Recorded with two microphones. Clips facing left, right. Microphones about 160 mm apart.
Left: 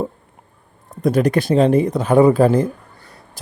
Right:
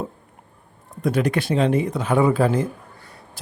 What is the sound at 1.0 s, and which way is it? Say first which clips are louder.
A man's voice: left 5 dB; 40° left (ahead or behind).